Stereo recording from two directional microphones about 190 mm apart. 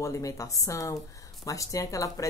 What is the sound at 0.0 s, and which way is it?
Speech, 15° left (ahead or behind).